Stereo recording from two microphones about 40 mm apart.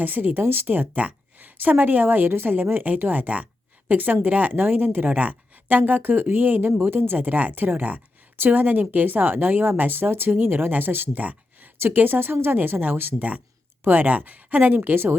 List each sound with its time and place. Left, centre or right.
0.0 s speech: right
0.9 s a woman's voice: right
6.7 s speech: right
7.2 s speech: right
11.2 s a sound: right
11.9 s speech: right
12.5 s speech: right
13.8 s speech: right